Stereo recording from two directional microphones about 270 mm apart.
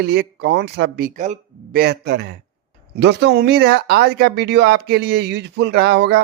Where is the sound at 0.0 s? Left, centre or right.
Right.